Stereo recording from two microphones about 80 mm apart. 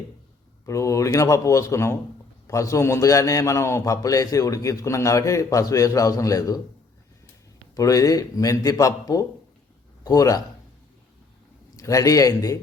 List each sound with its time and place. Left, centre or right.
0.6 s a man's voice: left
7.8 s a man's voice: left
11.8 s a man's voice: left